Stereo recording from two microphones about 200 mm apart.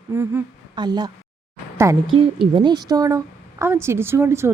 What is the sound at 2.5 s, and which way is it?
A woman's voice, 20° right (ahead or behind).